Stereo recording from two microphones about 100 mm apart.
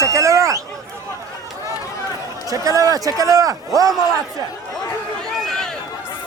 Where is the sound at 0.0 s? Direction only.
30° right (ahead or behind).